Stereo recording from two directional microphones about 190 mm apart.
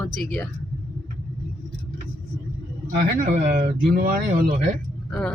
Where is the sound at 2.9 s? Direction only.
45° right (ahead or behind).